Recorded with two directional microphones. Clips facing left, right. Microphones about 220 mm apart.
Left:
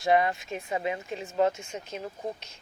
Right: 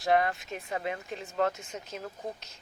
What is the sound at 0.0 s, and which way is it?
Speech, centre (ahead or behind).